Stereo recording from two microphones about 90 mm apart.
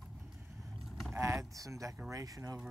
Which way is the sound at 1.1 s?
30° right (ahead or behind).